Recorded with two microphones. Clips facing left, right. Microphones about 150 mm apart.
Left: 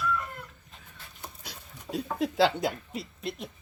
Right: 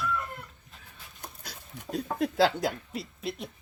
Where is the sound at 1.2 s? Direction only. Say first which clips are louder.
Even; centre (ahead or behind).